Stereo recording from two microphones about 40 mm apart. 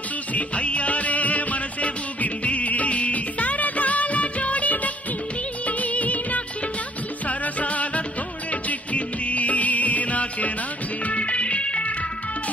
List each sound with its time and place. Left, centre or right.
0.3 s music: left
5.7 s music of bollywood: left
7.2 s music: left